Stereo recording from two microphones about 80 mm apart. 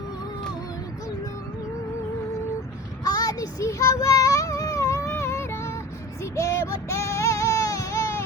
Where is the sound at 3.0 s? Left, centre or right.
Left.